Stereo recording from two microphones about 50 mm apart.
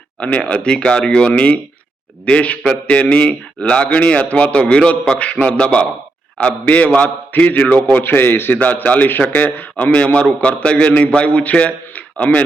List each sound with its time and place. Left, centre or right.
0.2 s a man's voice: left
8.0 s a man's voice: left
9.8 s a man's voice: left